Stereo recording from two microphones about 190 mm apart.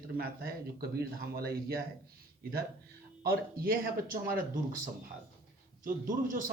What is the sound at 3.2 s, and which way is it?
Speech, 50° right (ahead or behind).